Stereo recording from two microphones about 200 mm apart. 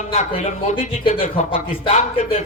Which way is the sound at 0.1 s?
35° left (ahead or behind).